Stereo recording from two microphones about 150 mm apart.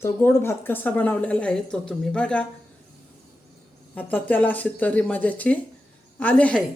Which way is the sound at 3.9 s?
10° left (ahead or behind).